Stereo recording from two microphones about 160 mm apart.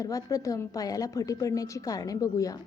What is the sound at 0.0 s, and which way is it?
A woman's voice, 20° left (ahead or behind).